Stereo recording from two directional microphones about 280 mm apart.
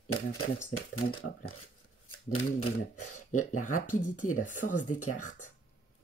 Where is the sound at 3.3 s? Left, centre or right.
Left.